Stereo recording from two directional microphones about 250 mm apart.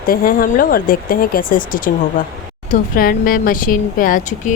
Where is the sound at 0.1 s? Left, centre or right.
Left.